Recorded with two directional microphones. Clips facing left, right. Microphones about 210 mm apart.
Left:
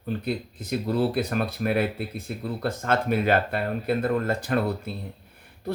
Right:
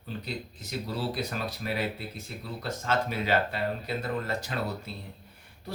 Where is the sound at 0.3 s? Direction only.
55° left (ahead or behind).